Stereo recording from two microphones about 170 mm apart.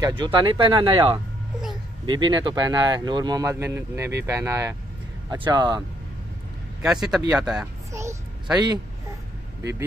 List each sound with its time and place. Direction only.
0.0 s speech: 30° right (ahead or behind)
6.8 s speech: 5° right (ahead or behind)
7.9 s speech: 15° right (ahead or behind)
9.6 s speech: 15° right (ahead or behind)